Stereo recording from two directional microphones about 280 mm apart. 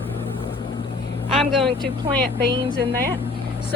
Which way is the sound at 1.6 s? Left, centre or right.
Centre.